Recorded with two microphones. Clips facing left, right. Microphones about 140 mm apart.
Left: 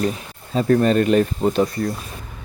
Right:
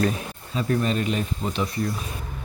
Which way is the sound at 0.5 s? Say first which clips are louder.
Left 8 dB; 50° left (ahead or behind).